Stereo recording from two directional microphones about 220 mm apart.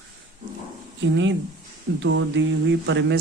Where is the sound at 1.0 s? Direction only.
55° right (ahead or behind).